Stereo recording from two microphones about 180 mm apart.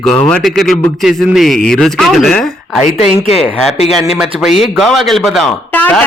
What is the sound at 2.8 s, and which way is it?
Speech, 40° left (ahead or behind).